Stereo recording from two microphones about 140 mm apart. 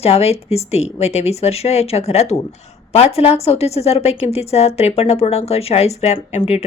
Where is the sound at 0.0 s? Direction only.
45° left (ahead or behind).